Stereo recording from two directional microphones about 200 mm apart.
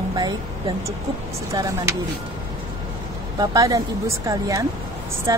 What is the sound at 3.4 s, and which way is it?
A woman's voice, 15° right (ahead or behind).